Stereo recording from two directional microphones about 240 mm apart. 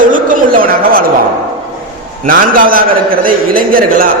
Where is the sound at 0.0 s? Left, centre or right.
Right.